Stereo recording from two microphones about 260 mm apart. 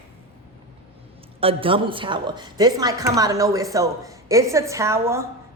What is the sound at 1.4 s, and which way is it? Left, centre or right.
A woman's voice, right.